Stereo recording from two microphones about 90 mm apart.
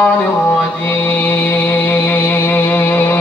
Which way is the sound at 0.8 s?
20° left (ahead or behind).